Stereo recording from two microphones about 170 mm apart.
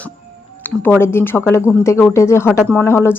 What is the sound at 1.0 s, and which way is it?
A woman's voice, 15° left (ahead or behind).